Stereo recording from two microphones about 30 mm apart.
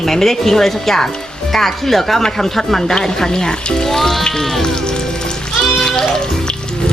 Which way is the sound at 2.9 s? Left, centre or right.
Left.